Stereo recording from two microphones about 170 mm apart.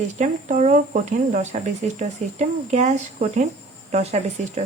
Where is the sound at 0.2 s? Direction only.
45° right (ahead or behind).